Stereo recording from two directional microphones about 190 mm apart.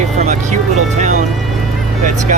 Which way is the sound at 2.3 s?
45° right (ahead or behind).